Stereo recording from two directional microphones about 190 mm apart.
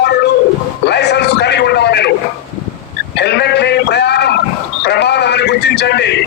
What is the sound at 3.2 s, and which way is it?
A man's voice, 60° left (ahead or behind).